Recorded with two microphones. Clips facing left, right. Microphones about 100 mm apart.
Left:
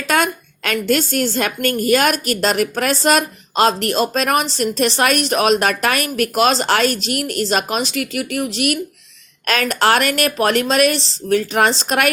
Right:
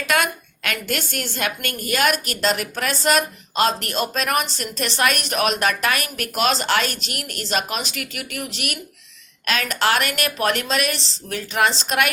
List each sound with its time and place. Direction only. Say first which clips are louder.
0.1 s a woman's voice: left 4 dB; 40° left (ahead or behind)